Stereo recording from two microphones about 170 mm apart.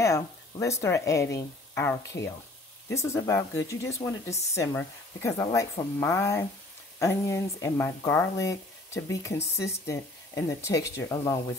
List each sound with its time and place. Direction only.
0.0 s speech: 15° left (ahead or behind)